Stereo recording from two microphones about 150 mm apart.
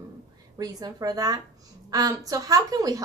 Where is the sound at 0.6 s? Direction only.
25° right (ahead or behind).